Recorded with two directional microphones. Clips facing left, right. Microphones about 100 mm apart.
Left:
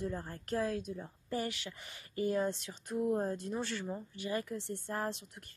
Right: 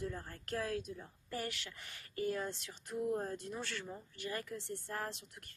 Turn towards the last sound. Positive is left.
turn(degrees=20)  # may be behind; listen again after turning